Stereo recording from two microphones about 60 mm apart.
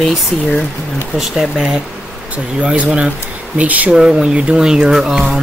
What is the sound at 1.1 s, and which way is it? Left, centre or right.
Speech, centre.